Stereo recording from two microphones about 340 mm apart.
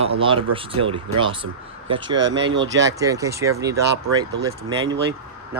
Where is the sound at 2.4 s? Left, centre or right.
Right.